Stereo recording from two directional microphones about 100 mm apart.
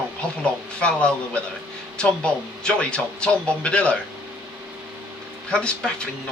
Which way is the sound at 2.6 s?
10° left (ahead or behind).